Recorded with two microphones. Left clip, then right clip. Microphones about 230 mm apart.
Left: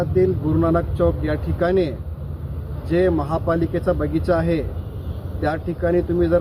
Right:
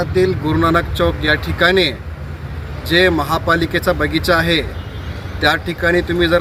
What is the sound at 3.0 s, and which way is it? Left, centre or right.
Speech, centre.